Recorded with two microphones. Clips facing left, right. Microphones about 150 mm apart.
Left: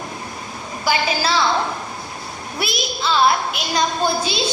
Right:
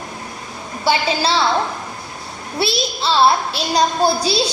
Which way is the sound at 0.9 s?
30° right (ahead or behind).